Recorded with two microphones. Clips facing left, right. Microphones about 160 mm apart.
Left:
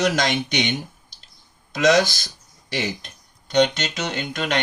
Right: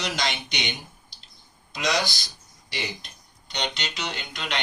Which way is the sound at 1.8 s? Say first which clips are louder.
Left 9 dB; 50° left (ahead or behind).